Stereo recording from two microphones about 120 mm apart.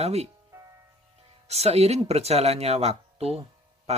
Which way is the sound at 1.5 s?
60° right (ahead or behind).